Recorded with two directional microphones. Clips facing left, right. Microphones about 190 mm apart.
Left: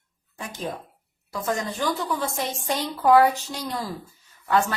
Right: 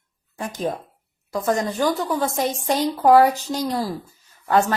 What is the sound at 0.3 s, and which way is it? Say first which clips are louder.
A woman's voice: right 6 dB; 45° right (ahead or behind).